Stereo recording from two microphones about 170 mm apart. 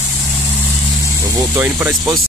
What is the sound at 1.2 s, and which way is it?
Speech, 20° right (ahead or behind).